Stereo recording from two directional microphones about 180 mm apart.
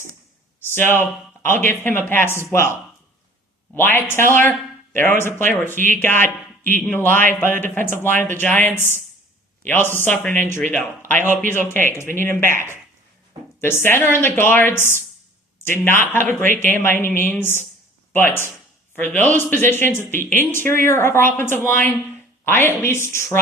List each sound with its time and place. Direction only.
0.8 s speech: 10° left (ahead or behind)
3.8 s speech: 10° left (ahead or behind)
10.4 s speech: 45° right (ahead or behind)
11.3 s speech: 10° left (ahead or behind)